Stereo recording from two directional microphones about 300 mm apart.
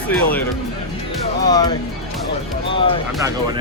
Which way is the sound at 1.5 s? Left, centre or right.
Centre.